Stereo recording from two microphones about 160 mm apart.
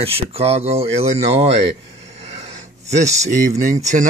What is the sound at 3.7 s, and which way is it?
Speech, 50° right (ahead or behind).